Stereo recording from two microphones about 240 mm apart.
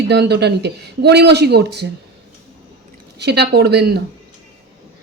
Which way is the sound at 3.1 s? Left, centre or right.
Right.